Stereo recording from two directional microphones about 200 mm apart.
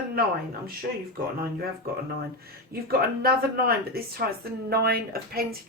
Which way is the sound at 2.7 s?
50° right (ahead or behind).